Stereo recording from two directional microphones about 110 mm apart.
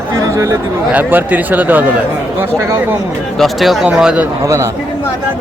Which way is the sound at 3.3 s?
Centre (ahead or behind).